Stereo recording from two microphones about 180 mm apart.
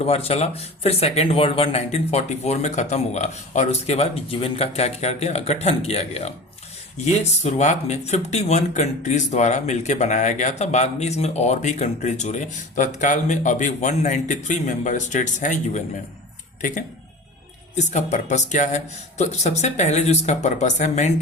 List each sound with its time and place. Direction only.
0.0 s speech: 35° left (ahead or behind)